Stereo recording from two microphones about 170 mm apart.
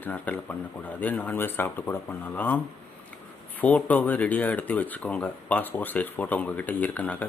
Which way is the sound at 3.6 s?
10° left (ahead or behind).